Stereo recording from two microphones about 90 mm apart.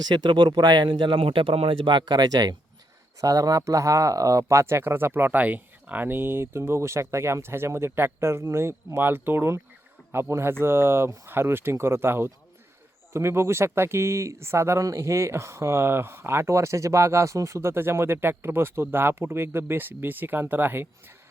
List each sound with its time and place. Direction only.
0.0 s speech: 50° right (ahead or behind); by 20.8 s 25° right (ahead or behind)